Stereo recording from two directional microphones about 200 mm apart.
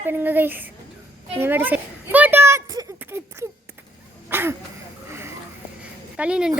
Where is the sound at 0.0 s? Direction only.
10° right (ahead or behind).